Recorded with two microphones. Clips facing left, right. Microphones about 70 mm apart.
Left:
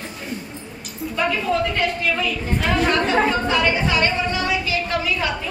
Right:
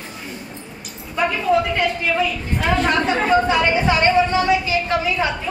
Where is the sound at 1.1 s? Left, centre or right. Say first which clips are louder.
Right 3 dB; centre.